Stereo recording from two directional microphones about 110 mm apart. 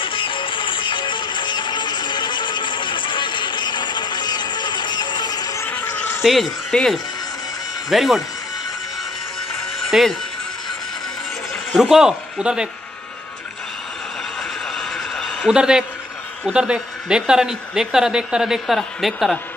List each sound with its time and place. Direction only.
0.0 s music: 50° left (ahead or behind)
5.6 s a sound: 20° left (ahead or behind)
6.2 s speech: centre (ahead or behind)
9.8 s music: centre (ahead or behind)
11.7 s a man's voice: 5° right (ahead or behind)
14.7 s a sound: 5° left (ahead or behind)
15.4 s a woman's voice: 5° right (ahead or behind)